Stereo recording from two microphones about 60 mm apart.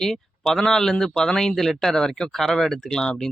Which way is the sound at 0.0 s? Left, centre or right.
Centre.